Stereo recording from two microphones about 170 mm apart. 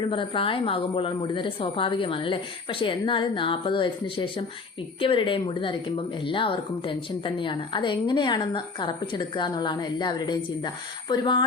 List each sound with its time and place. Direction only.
0.1 s a woman's voice: 30° left (ahead or behind)